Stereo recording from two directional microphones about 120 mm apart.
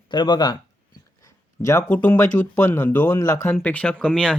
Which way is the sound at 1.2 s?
25° left (ahead or behind).